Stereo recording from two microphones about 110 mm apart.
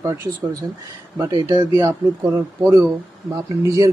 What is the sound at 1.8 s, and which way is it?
A man's voice, 25° right (ahead or behind).